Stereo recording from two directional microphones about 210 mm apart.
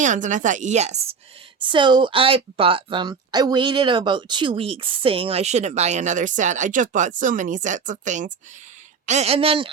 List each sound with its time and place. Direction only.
0.0 s a woman's voice: 35° right (ahead or behind)
1.5 s a woman's voice: 20° right (ahead or behind)